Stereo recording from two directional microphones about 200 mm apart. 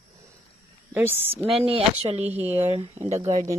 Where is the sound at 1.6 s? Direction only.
30° right (ahead or behind).